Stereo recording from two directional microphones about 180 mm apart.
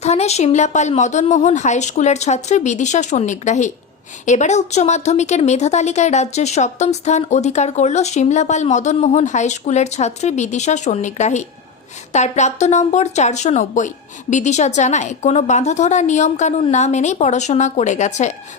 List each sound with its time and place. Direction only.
0.0 s speech: 35° left (ahead or behind)